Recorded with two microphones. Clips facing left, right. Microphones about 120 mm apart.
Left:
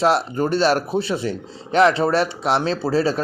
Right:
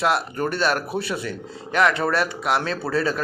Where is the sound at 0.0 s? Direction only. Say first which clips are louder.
Left 4 dB; 30° left (ahead or behind).